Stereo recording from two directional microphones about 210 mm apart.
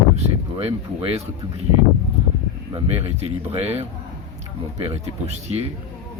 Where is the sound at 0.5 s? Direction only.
25° right (ahead or behind).